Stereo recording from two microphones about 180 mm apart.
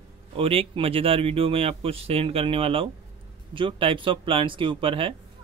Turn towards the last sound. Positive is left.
turn(degrees=-30)  # may be behind; listen again after turning